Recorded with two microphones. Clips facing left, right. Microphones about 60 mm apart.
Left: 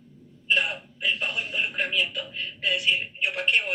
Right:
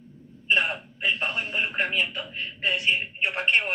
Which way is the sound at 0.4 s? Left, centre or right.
Right.